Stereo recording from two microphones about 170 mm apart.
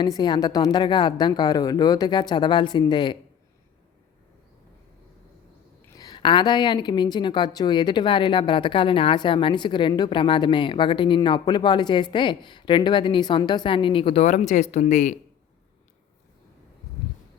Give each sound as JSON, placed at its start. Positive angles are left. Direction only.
{"t": 0.0, "sound": "speech", "side_deg": 25}
{"t": 6.0, "sound": "speech", "side_deg": 25}